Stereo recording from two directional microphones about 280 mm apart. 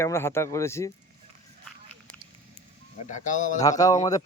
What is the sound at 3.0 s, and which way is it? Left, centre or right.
Speech, left.